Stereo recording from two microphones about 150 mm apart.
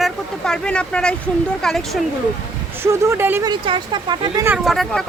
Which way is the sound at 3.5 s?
30° right (ahead or behind).